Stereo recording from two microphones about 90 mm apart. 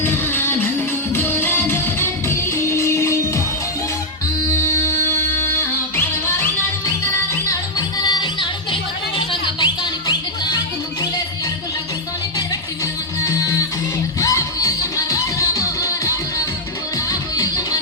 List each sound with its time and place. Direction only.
0.0 s music: 25° left (ahead or behind)
4.6 s music: 30° left (ahead or behind)
7.8 s music: 50° left (ahead or behind); by 9.6 s 65° left (ahead or behind)
13.2 s music: 40° left (ahead or behind)